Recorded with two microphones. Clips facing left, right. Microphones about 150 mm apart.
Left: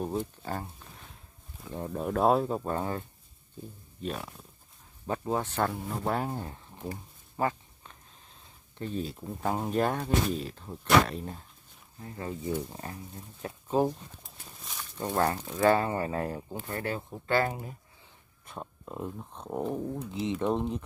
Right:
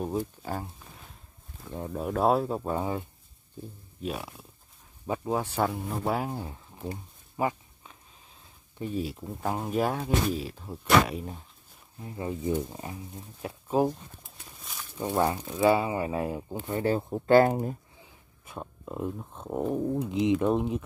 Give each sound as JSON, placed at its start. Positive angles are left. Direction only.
{"t": 0.4, "sound": "a sound", "side_deg": -5}
{"t": 1.6, "sound": "speech", "side_deg": 0}
{"t": 6.9, "sound": "a sound", "side_deg": -15}
{"t": 8.7, "sound": "speech", "side_deg": -10}
{"t": 14.6, "sound": "a sound", "side_deg": 0}
{"t": 15.0, "sound": "speech", "side_deg": -10}
{"t": 16.8, "sound": "speech", "side_deg": -35}
{"t": 18.4, "sound": "speech", "side_deg": 0}
{"t": 19.9, "sound": "speech", "side_deg": -20}
{"t": 20.3, "sound": "speech", "side_deg": -5}